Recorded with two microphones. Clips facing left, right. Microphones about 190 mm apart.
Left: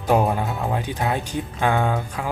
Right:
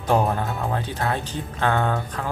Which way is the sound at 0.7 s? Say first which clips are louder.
Left 2 dB; 15° left (ahead or behind).